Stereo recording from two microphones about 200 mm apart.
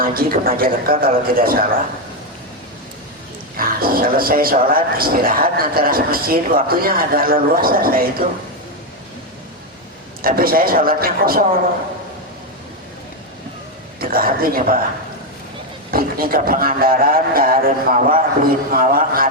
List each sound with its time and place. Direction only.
0.0 s speech: 45° right (ahead or behind)
3.6 s speech: 45° right (ahead or behind)
10.2 s speech: 45° right (ahead or behind)
14.0 s speech: 45° right (ahead or behind)
15.9 s speech: 45° right (ahead or behind)